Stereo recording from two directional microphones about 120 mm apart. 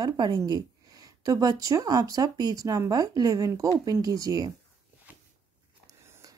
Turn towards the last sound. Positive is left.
turn(degrees=-30)  # may be behind; listen again after turning